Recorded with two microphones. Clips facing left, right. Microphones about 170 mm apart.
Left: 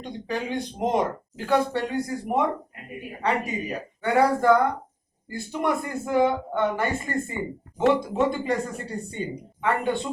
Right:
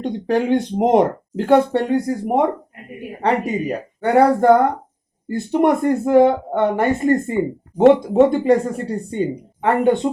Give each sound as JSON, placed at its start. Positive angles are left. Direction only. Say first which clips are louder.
{"t": 0.0, "sound": "speech", "louder": "right 11 dB", "side_deg": -65}